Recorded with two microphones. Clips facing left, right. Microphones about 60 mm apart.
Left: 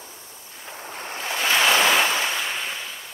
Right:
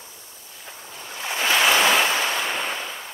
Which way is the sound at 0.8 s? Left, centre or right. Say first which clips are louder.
Left 2 dB; left.